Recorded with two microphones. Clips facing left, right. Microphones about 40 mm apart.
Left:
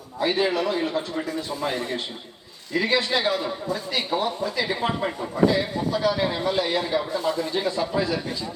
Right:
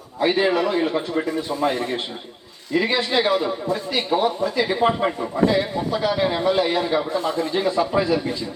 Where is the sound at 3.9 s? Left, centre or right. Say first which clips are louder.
Right 5 dB; centre.